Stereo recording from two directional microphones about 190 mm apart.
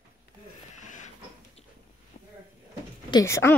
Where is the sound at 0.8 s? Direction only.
40° left (ahead or behind).